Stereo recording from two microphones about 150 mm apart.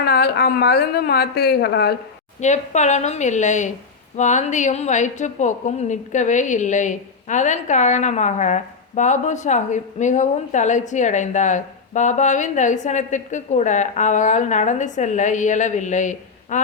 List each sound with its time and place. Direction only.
0.0 s a woman's voice: 90° left
2.4 s a woman's voice: 50° left (ahead or behind)